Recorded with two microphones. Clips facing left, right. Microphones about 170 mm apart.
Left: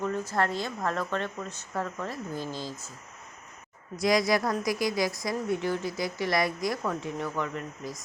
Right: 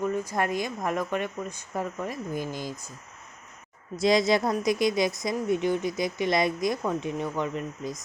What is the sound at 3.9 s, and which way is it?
A woman's voice, 25° right (ahead or behind).